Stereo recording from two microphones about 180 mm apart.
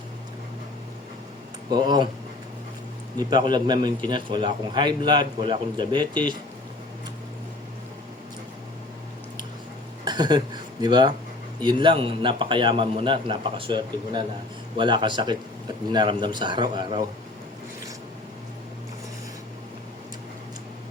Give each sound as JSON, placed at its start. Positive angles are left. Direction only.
{"t": 1.7, "sound": "a man's voice", "side_deg": -25}
{"t": 3.5, "sound": "a man's voice", "side_deg": -25}
{"t": 10.0, "sound": "a man's voice", "side_deg": -25}